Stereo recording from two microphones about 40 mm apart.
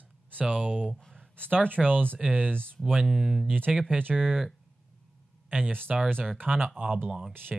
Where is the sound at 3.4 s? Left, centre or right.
Right.